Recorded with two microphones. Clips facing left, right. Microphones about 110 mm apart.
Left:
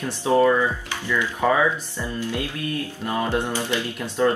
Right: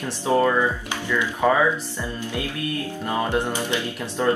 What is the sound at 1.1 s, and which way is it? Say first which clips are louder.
Speech: right 1 dB; 15° right (ahead or behind).